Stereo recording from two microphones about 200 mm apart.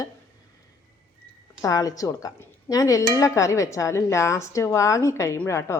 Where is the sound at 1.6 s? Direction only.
15° left (ahead or behind).